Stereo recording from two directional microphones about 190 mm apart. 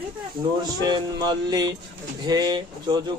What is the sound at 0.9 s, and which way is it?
Speech, 20° right (ahead or behind).